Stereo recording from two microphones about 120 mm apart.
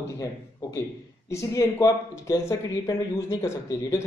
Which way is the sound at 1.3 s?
25° left (ahead or behind).